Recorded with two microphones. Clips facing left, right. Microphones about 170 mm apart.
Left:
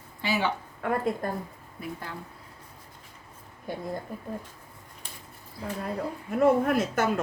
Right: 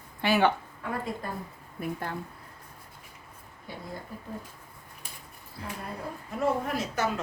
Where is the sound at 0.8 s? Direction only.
60° left (ahead or behind).